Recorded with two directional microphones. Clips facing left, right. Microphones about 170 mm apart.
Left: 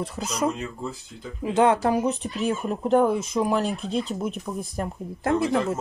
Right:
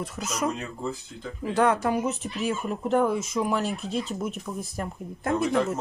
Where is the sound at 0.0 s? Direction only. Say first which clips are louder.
Left 3 dB; 35° left (ahead or behind).